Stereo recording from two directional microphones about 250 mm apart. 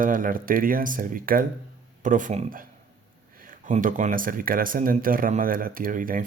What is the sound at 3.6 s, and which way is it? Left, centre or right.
Speech, right.